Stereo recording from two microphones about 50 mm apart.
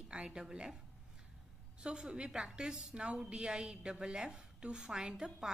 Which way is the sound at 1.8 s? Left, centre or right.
Centre.